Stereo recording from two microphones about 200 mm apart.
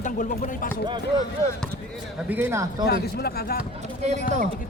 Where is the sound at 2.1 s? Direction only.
10° right (ahead or behind).